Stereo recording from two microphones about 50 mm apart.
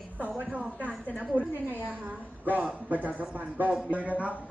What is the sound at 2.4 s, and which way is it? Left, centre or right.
Speech, right.